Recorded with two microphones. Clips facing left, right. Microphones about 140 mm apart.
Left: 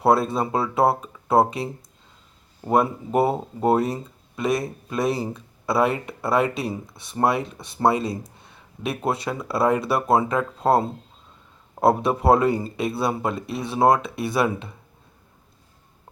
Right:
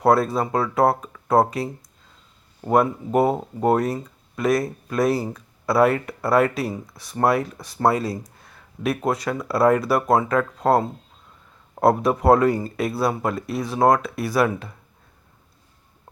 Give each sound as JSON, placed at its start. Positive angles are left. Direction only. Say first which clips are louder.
{"t": 0.1, "sound": "speech", "louder": "right 1 dB", "side_deg": 25}
{"t": 3.2, "sound": "speech", "louder": "right 1 dB", "side_deg": 5}
{"t": 4.4, "sound": "speech", "louder": "right 3 dB", "side_deg": 25}
{"t": 8.4, "sound": "a sound", "louder": "right 3 dB", "side_deg": 25}
{"t": 9.0, "sound": "speech", "louder": "right 2 dB", "side_deg": 25}
{"t": 11.7, "sound": "a sound", "louder": "right 1 dB", "side_deg": 0}
{"t": 12.0, "sound": "speech", "louder": "right 2 dB", "side_deg": 25}